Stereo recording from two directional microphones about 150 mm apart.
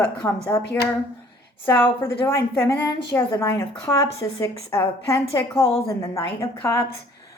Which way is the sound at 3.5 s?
30° left (ahead or behind).